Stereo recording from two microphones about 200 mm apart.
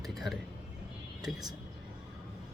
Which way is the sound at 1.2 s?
20° right (ahead or behind).